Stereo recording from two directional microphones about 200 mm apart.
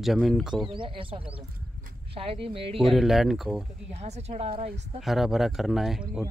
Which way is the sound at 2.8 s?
Centre (ahead or behind).